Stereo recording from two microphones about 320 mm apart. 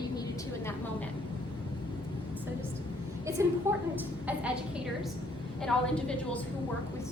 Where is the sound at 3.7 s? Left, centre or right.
Centre.